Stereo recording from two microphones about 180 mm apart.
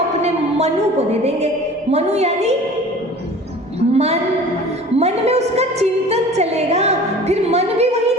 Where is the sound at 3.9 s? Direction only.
35° right (ahead or behind).